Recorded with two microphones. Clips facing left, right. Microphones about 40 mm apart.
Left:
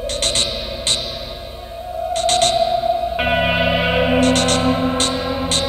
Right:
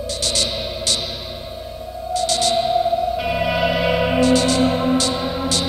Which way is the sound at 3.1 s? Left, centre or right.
Left.